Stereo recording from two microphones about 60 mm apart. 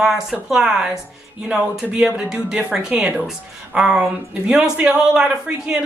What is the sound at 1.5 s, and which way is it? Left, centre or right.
Speech, right.